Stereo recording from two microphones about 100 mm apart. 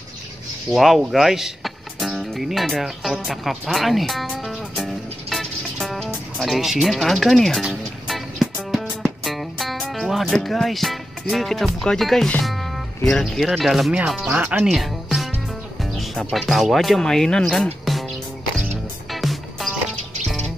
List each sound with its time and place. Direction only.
0.7 s speech: centre (ahead or behind)
4.3 s music: 5° right (ahead or behind)
12.4 s speech: centre (ahead or behind); by 14.6 s 15° right (ahead or behind)
14.6 s music: centre (ahead or behind)
16.3 s speech: centre (ahead or behind)
19.0 s music: centre (ahead or behind)